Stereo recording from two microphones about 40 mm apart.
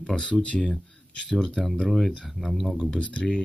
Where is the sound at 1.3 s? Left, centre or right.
Centre.